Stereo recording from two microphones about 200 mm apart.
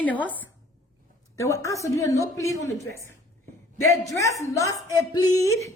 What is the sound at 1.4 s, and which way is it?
A woman's voice, 15° left (ahead or behind).